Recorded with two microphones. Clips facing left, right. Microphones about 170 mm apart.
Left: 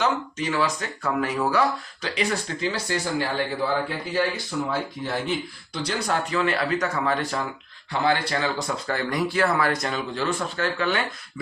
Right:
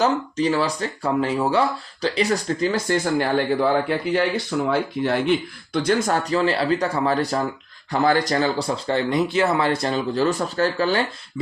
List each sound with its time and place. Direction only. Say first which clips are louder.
0.0 s speech: right 5 dB; 35° right (ahead or behind)